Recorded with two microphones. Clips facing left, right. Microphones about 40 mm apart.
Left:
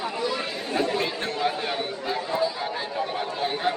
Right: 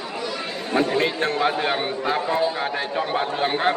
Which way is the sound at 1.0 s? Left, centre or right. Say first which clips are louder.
Right 5 dB; right.